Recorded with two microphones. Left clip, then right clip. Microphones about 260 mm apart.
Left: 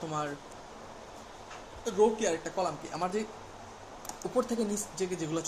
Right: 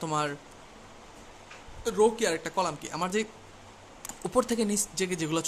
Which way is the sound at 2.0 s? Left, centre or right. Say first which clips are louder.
Right 2 dB; right.